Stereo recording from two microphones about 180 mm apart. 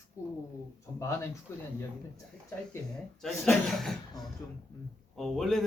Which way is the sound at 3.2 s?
Centre (ahead or behind).